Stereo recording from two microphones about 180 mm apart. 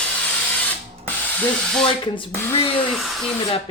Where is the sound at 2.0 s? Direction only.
25° left (ahead or behind).